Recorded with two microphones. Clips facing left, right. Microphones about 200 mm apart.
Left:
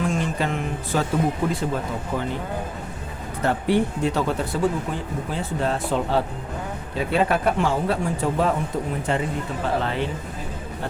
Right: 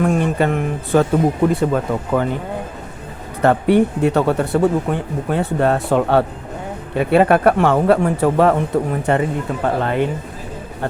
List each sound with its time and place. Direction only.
0.0 s speech: 60° right (ahead or behind)
3.4 s speech: 60° right (ahead or behind)